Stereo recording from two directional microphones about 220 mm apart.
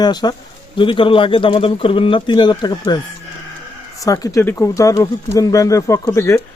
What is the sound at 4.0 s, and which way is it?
Speech, 15° left (ahead or behind).